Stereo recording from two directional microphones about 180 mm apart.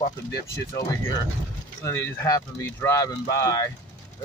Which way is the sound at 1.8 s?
15° left (ahead or behind).